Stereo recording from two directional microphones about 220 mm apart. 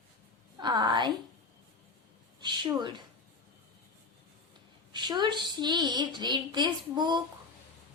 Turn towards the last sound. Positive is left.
turn(degrees=-20)  # may be behind; listen again after turning